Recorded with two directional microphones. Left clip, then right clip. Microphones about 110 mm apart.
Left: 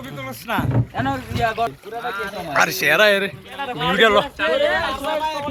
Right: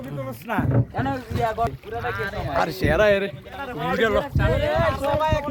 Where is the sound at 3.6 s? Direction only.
90° left.